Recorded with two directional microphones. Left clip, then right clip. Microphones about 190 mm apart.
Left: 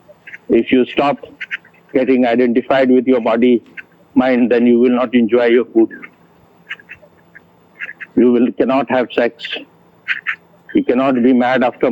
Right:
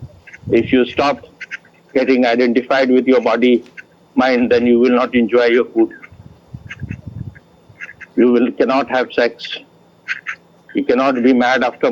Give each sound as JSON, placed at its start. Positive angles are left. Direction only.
{"t": 0.3, "sound": "speech", "side_deg": 50}
{"t": 6.7, "sound": "duck", "side_deg": 50}
{"t": 10.1, "sound": "speech", "side_deg": 50}